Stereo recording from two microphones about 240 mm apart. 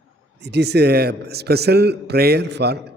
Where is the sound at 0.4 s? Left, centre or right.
Right.